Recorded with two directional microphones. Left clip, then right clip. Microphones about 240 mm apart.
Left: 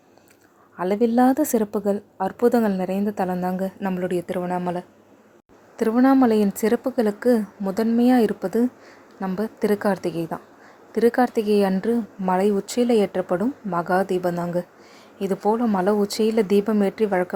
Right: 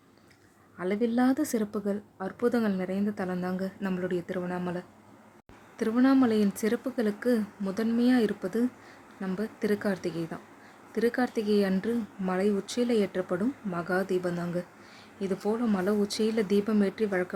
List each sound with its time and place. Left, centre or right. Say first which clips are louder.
0.8 s a woman's voice: left 9 dB; centre